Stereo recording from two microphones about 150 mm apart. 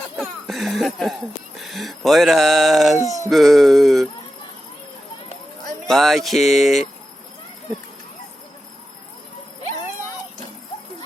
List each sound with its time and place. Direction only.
0.2 s music: centre (ahead or behind)
1.5 s speech: centre (ahead or behind)
3.0 s a sound: 20° right (ahead or behind)
3.2 s speech: centre (ahead or behind)
5.9 s speech: centre (ahead or behind)